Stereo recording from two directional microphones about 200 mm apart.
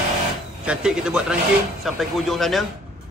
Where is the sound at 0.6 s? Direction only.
5° right (ahead or behind).